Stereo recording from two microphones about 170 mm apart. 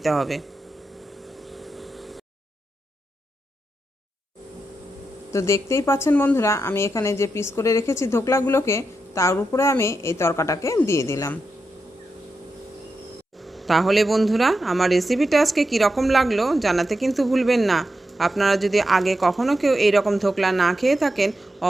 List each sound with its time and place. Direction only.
0.0 s speech: centre (ahead or behind)
1.3 s vehicle: centre (ahead or behind)
5.3 s speech: 15° left (ahead or behind)
13.4 s speech: centre (ahead or behind)